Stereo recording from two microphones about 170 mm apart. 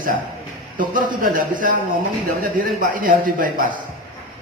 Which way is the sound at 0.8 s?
55° right (ahead or behind).